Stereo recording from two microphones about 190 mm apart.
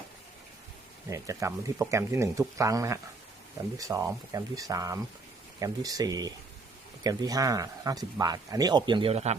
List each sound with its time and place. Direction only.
1.1 s speech: 15° right (ahead or behind); by 9.3 s 30° right (ahead or behind)